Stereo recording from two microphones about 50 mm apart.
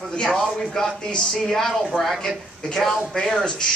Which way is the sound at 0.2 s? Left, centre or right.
Centre.